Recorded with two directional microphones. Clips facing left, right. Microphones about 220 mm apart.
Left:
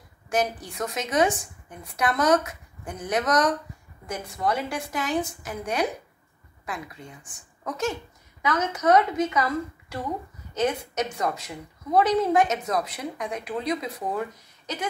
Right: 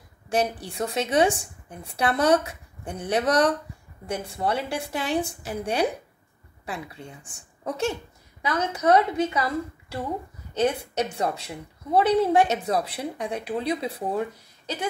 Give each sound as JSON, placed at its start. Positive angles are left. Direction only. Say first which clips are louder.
{"t": 0.3, "sound": "a woman's voice", "louder": "right 1 dB", "side_deg": -30}
{"t": 10.5, "sound": "a woman's voice", "louder": "right 2 dB", "side_deg": -30}